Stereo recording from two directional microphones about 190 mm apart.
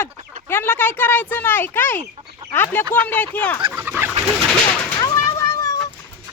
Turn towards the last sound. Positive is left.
turn(degrees=15)  # may be behind; listen again after turning